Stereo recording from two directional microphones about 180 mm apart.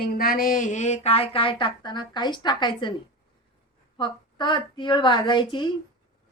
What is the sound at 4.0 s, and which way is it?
A woman's voice, 25° left (ahead or behind).